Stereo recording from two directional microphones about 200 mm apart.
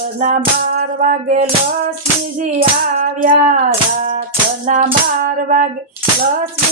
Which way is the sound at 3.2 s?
45° right (ahead or behind).